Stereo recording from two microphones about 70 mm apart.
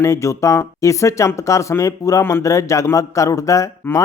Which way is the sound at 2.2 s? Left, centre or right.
Left.